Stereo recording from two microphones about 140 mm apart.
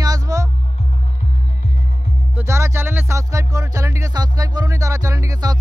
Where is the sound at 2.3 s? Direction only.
20° right (ahead or behind).